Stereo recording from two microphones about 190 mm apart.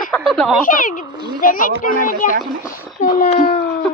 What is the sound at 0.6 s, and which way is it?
A child's voice, 45° left (ahead or behind).